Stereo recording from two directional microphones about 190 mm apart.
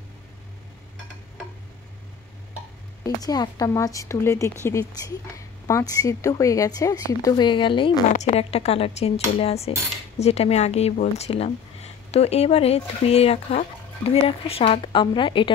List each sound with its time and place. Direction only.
3.0 s speech: 20° left (ahead or behind)
8.1 s dishes: 35° left (ahead or behind)